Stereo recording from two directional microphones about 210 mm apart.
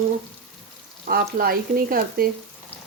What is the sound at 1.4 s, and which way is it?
Speech, 45° right (ahead or behind).